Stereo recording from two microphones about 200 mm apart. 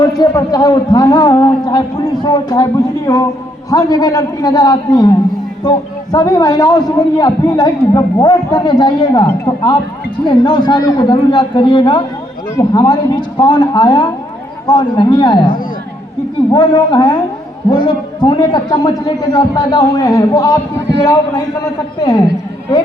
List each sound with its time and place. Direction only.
0.0 s a man's voice: 20° left (ahead or behind)